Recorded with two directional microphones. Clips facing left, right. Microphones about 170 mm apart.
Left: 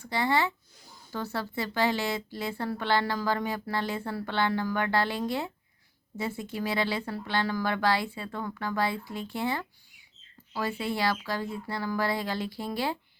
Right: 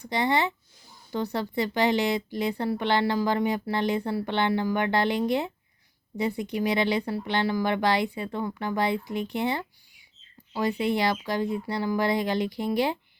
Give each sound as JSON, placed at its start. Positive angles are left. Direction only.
{"t": 0.0, "sound": "a woman's voice", "side_deg": -20}